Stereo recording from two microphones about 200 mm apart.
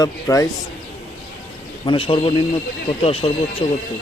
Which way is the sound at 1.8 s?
25° left (ahead or behind).